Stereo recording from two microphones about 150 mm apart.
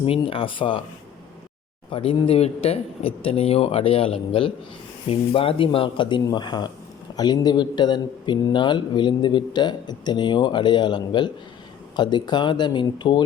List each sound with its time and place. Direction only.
0.0 s a man's voice: 40° left (ahead or behind)
1.9 s a man's voice: 35° left (ahead or behind)